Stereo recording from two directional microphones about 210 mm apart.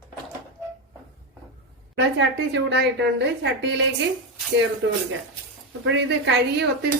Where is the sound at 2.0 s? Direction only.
55° right (ahead or behind).